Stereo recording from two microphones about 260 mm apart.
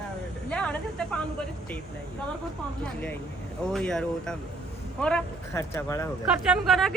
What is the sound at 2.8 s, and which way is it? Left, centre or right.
Speech, centre.